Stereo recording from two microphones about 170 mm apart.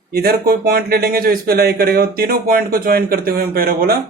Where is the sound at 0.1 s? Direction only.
65° right (ahead or behind).